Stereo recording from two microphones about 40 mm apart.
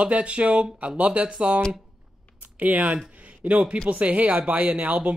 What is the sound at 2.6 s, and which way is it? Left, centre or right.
Speech, right.